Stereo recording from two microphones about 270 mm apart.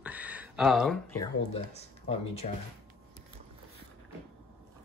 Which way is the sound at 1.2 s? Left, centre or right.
Left.